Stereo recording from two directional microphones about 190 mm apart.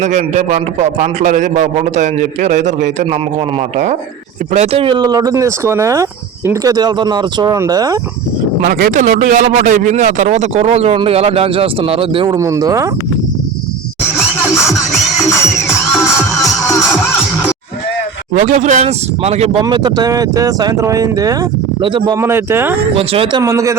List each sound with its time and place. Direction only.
0.0 s a man's voice: 40° right (ahead or behind)
4.5 s speech: 35° right (ahead or behind)
8.6 s a man's voice: 45° right (ahead or behind); by 12.3 s 30° right (ahead or behind)
12.3 s speech: 15° right (ahead or behind)
18.3 s a man's voice: 40° right (ahead or behind)
19.6 s speech: 20° right (ahead or behind)
23.0 s speech: 30° right (ahead or behind)
23.4 s speech: 15° right (ahead or behind)